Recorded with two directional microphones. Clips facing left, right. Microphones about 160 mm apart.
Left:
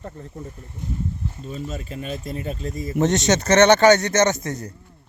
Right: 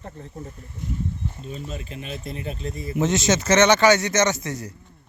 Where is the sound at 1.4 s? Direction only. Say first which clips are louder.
Left 6 dB; 40° left (ahead or behind).